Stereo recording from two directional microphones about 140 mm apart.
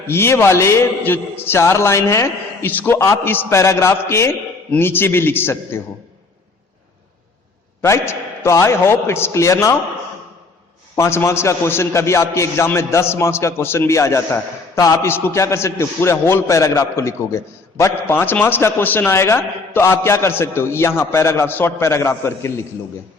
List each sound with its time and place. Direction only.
0.1 s a man's voice: 20° left (ahead or behind)
7.8 s a man's voice: 20° left (ahead or behind)
10.9 s a man's voice: 20° left (ahead or behind)